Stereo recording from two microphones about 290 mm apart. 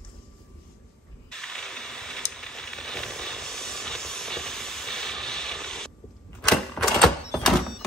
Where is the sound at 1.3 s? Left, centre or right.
Centre.